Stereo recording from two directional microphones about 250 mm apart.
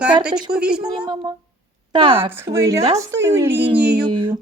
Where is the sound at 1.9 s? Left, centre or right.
Right.